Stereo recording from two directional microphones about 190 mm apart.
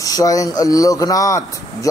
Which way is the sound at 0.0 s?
20° left (ahead or behind).